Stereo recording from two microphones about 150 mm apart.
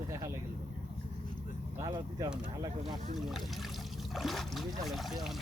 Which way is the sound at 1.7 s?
20° right (ahead or behind).